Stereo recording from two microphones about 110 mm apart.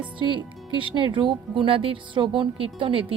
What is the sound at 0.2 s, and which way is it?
A woman's voice, 50° right (ahead or behind).